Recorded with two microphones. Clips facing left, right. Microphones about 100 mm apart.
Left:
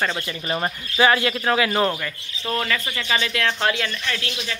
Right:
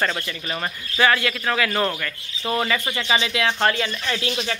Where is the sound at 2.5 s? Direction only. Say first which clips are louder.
Right 2 dB; 15° right (ahead or behind).